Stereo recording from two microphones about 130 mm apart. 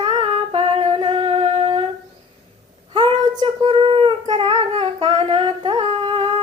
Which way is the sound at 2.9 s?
40° right (ahead or behind).